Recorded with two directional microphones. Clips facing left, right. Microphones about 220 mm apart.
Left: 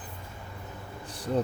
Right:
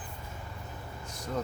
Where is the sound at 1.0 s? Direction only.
30° left (ahead or behind).